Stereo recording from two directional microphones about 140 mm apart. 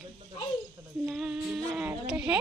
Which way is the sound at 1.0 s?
5° right (ahead or behind).